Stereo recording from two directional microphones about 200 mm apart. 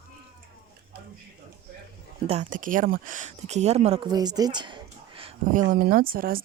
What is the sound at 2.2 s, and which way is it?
Speech, 35° right (ahead or behind).